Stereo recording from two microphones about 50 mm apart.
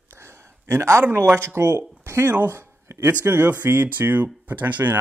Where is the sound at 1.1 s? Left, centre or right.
Right.